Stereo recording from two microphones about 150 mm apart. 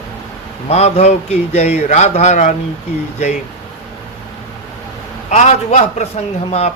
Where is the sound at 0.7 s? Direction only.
45° left (ahead or behind).